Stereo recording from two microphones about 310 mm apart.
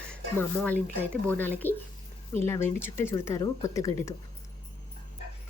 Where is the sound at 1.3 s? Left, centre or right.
Centre.